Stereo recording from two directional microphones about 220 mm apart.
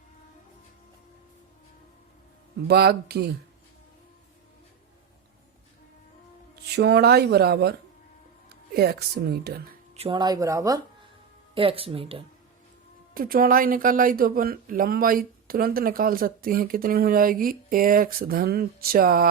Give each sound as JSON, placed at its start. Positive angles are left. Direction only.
{"t": 2.6, "sound": "speech", "side_deg": -45}
{"t": 6.7, "sound": "speech", "side_deg": -45}
{"t": 9.9, "sound": "speech", "side_deg": -25}
{"t": 13.1, "sound": "speech", "side_deg": -40}